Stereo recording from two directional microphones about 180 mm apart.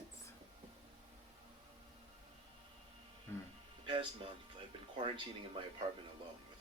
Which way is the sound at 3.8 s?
30° right (ahead or behind).